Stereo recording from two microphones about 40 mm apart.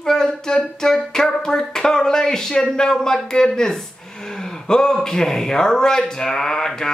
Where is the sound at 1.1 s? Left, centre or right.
Centre.